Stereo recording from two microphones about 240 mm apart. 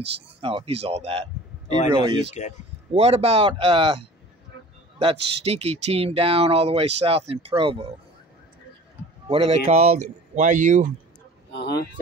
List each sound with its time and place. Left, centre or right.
0.4 s speech: right
9.3 s speech: right